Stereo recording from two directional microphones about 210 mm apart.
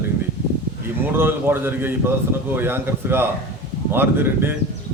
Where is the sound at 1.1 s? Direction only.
10° right (ahead or behind).